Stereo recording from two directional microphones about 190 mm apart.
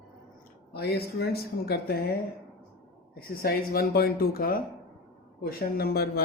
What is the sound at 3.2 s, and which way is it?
Speech, 50° left (ahead or behind).